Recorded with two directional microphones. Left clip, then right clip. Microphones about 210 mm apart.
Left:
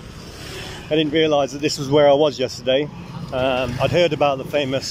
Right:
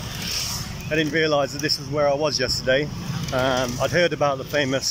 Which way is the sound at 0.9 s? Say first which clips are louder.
Left 3 dB; 15° left (ahead or behind).